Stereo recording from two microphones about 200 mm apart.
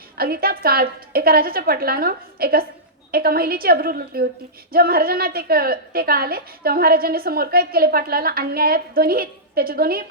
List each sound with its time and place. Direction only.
0.2 s a woman's voice: 50° right (ahead or behind)